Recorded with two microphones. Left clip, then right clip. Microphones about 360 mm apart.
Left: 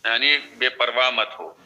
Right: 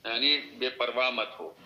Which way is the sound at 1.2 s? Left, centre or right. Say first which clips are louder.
Left 6 dB; left.